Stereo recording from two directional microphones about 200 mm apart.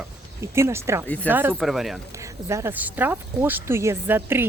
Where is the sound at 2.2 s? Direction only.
15° right (ahead or behind).